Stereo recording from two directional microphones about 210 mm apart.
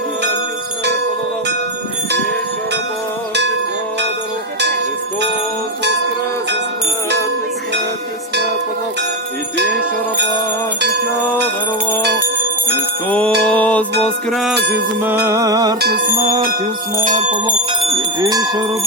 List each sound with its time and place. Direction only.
9.6 s music: 55° right (ahead or behind)
11.1 s music: 10° left (ahead or behind)
13.1 s music: 5° left (ahead or behind)
14.5 s a sound: 55° right (ahead or behind)
15.0 s music: 15° right (ahead or behind)
15.8 s music: 50° right (ahead or behind)
16.1 s music: 25° right (ahead or behind)
17.0 s bell: 35° right (ahead or behind)
18.2 s bell: 20° right (ahead or behind)